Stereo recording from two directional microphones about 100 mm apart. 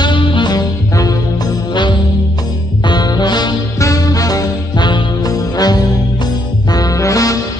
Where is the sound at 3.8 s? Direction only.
35° left (ahead or behind).